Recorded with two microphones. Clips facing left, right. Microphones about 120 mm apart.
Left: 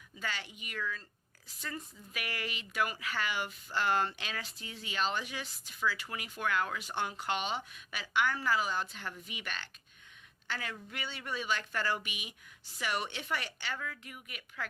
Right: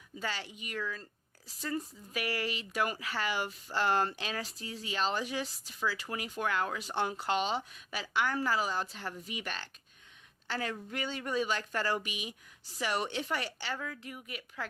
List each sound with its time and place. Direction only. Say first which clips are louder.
0.2 s speech: right 2 dB; 35° right (ahead or behind)